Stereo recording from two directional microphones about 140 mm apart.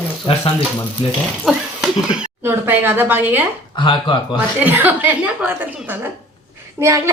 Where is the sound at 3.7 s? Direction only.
35° left (ahead or behind).